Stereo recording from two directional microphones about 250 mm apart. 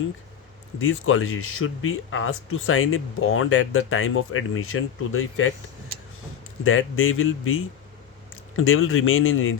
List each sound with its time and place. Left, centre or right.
0.8 s speech: left
6.7 s speech: left